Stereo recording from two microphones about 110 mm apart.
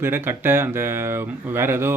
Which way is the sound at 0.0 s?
20° right (ahead or behind).